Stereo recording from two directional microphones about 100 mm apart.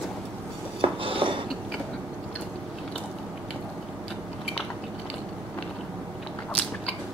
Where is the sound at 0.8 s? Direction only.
60° right (ahead or behind).